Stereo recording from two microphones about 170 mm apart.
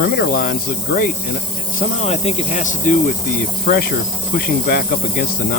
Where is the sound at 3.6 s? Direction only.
65° left (ahead or behind).